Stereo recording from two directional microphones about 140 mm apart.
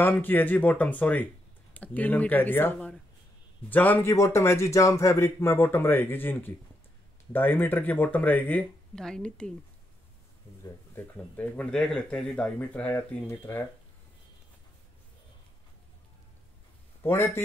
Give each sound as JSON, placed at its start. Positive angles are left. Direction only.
{"t": 0.0, "sound": "speech", "side_deg": 15}
{"t": 10.6, "sound": "speech", "side_deg": 15}
{"t": 17.0, "sound": "a man's voice", "side_deg": 20}